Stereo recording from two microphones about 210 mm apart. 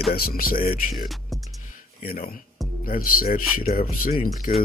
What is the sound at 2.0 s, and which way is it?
Speech, 45° left (ahead or behind).